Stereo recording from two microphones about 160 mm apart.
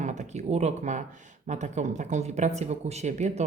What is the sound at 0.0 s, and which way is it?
Speech, 50° right (ahead or behind).